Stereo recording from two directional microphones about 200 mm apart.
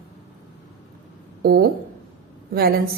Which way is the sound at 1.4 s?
50° right (ahead or behind).